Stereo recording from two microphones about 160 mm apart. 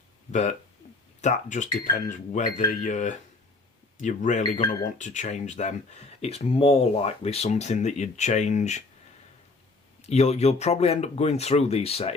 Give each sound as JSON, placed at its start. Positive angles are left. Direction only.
{"t": 0.3, "sound": "speech", "side_deg": 50}
{"t": 10.0, "sound": "speech", "side_deg": 40}